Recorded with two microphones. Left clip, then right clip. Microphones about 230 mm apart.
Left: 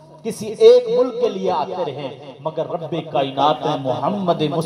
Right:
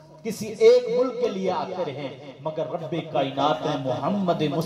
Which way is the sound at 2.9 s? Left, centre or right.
Left.